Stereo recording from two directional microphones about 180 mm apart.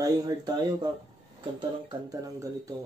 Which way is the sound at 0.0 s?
20° right (ahead or behind).